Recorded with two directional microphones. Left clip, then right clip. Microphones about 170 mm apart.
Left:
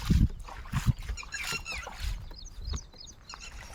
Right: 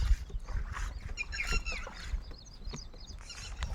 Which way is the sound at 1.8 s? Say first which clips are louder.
Left 4 dB; 40° left (ahead or behind).